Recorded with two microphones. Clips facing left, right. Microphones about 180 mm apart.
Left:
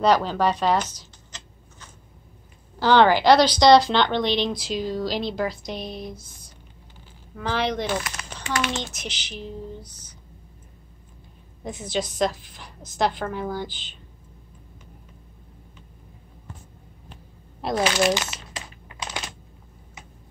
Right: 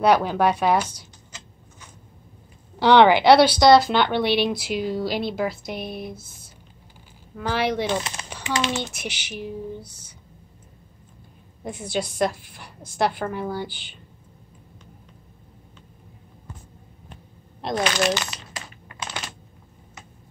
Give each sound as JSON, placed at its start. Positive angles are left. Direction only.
{"t": 0.0, "sound": "a sound", "side_deg": -10}
{"t": 2.8, "sound": "speech", "side_deg": -15}
{"t": 5.8, "sound": "a sound", "side_deg": -55}
{"t": 7.3, "sound": "speech", "side_deg": -10}
{"t": 7.9, "sound": "speech", "side_deg": -25}
{"t": 8.3, "sound": "a sound", "side_deg": -10}
{"t": 8.9, "sound": "speech", "side_deg": -10}
{"t": 11.8, "sound": "a woman's voice", "side_deg": -10}
{"t": 17.1, "sound": "shuffling cards", "side_deg": 5}
{"t": 18.9, "sound": "typing", "side_deg": 15}